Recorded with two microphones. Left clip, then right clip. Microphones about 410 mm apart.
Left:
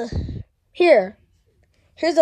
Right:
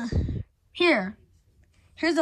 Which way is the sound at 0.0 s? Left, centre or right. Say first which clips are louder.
Left 4 dB; centre.